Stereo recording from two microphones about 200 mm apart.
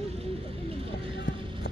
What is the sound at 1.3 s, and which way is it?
Run, 40° left (ahead or behind).